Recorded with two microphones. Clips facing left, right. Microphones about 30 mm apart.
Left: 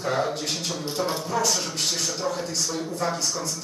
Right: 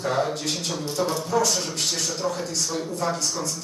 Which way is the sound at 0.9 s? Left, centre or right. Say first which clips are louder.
Right 2 dB; centre.